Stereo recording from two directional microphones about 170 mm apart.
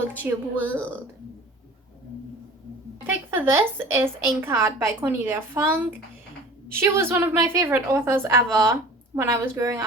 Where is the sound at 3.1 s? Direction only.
10° right (ahead or behind).